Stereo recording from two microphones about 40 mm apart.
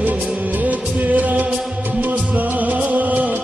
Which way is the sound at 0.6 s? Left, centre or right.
Right.